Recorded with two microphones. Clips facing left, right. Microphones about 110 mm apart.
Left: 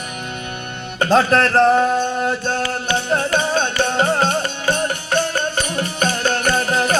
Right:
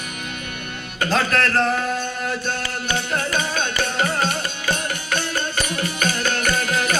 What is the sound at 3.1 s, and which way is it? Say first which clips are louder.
Music: left 8 dB; 30° left (ahead or behind).